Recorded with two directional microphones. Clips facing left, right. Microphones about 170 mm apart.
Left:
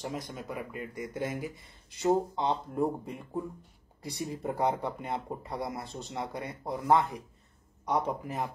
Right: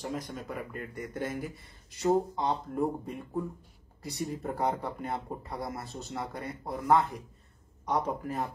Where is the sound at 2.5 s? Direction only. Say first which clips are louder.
Even; 20° left (ahead or behind).